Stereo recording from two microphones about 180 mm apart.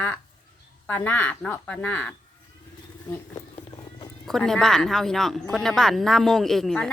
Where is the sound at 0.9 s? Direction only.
10° left (ahead or behind).